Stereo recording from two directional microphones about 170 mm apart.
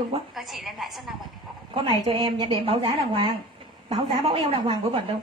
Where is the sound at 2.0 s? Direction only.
30° right (ahead or behind).